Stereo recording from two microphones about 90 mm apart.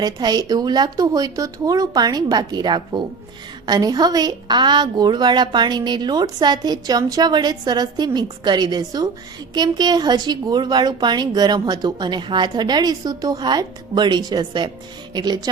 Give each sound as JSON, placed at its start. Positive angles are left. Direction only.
{"t": 0.0, "sound": "a woman's voice", "side_deg": -50}